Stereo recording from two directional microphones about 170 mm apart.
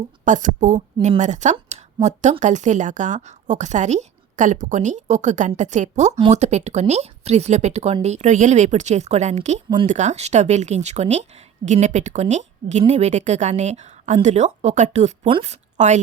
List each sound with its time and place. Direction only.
0.3 s a woman's voice: 50° right (ahead or behind)